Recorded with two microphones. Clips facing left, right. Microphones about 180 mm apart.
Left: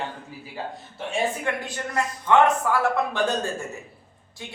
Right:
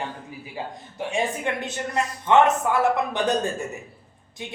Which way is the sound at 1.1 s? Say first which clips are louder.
Even; 20° right (ahead or behind).